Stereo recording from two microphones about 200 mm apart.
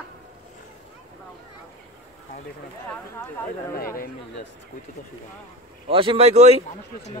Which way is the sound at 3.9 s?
45° left (ahead or behind).